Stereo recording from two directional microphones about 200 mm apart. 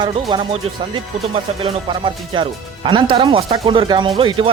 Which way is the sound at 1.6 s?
25° right (ahead or behind).